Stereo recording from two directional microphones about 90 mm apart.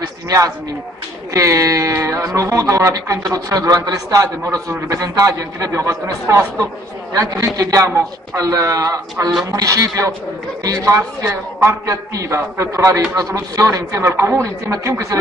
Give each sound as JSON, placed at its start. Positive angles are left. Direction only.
{"t": 1.3, "sound": "a sound", "side_deg": -35}
{"t": 2.7, "sound": "a man's voice", "side_deg": -40}
{"t": 11.0, "sound": "a man's voice", "side_deg": -30}